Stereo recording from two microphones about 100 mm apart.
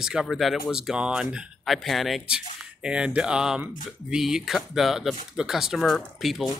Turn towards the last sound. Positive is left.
turn(degrees=0)  # may be behind; listen again after turning